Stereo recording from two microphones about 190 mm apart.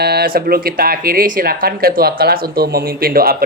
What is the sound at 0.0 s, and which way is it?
Speech, 55° right (ahead or behind).